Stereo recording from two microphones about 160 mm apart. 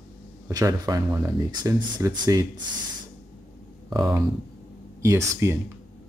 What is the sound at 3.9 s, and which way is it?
Speech, 25° right (ahead or behind).